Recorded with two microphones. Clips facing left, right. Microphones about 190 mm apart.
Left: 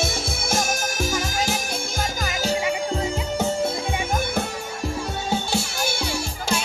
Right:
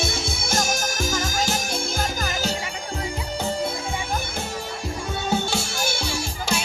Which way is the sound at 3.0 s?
25° left (ahead or behind).